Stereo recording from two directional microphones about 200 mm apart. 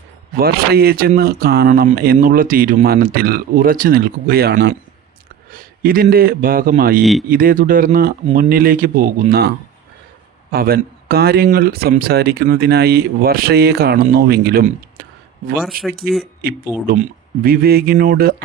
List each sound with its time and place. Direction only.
0.3 s a man's voice: 50° right (ahead or behind)
7.0 s speech: centre (ahead or behind)
7.3 s speech: 45° right (ahead or behind)
10.5 s speech: 50° right (ahead or behind)